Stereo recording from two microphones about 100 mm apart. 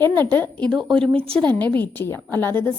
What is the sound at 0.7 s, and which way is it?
Speech, centre (ahead or behind).